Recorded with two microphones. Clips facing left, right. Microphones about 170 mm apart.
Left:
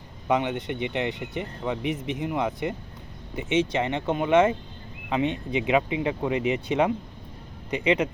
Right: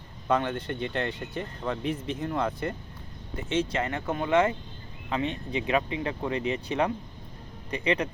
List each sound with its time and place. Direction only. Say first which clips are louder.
0.3 s speech: left 2 dB; 15° left (ahead or behind)